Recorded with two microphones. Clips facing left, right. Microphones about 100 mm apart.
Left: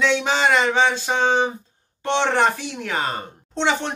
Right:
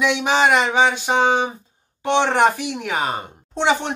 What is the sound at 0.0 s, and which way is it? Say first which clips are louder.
A woman's voice: right 2 dB; 15° right (ahead or behind).